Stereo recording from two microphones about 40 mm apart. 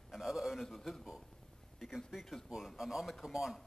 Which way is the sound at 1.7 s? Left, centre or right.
Centre.